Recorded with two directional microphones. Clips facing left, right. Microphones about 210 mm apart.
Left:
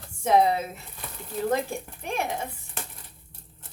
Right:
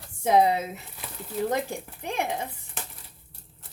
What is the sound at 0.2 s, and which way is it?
Speech, 20° right (ahead or behind).